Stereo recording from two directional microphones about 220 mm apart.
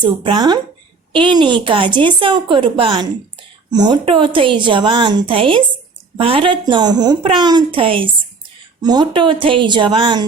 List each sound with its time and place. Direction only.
0.0 s a woman's voice: 20° right (ahead or behind)